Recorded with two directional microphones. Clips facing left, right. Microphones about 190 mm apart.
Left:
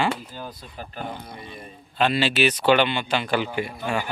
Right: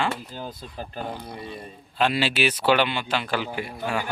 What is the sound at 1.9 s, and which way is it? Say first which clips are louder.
A man's voice: left 2 dB; 5° right (ahead or behind).